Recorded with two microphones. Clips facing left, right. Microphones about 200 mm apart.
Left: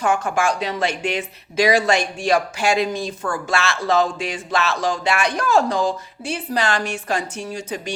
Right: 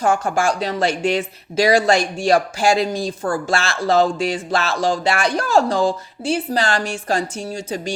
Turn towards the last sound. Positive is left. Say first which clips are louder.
# right 2 dB
turn(degrees=-30)  # may be behind; listen again after turning